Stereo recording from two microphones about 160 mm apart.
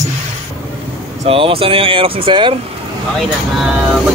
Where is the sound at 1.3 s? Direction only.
35° right (ahead or behind).